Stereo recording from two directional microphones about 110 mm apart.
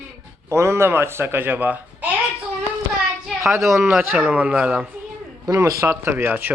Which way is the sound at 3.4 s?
25° right (ahead or behind).